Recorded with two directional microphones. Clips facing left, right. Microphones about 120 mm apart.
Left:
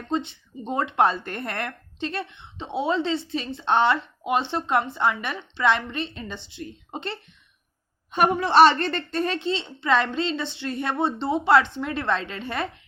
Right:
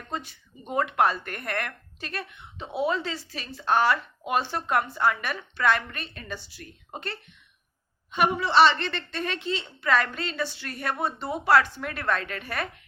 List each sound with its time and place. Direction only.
0.1 s speech: 25° left (ahead or behind)
8.1 s speech: 45° left (ahead or behind); by 12.6 s 25° left (ahead or behind)